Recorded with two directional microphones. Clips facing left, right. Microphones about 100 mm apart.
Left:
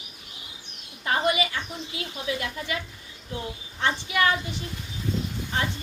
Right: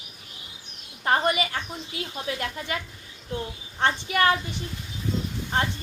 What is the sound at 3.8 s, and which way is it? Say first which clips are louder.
Speech: right 2 dB; 45° right (ahead or behind).